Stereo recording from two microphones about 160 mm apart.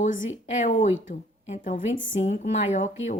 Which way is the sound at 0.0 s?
50° left (ahead or behind).